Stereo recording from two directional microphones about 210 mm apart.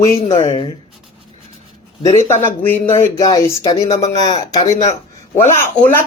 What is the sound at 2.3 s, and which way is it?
Speech, 10° left (ahead or behind).